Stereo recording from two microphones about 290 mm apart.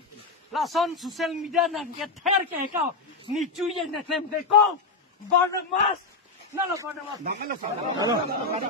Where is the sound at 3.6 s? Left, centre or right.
Centre.